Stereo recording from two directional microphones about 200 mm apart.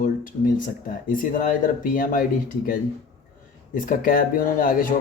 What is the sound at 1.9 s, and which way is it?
Speech, 45° left (ahead or behind).